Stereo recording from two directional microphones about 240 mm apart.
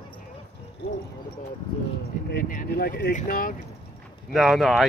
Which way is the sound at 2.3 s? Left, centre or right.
Left.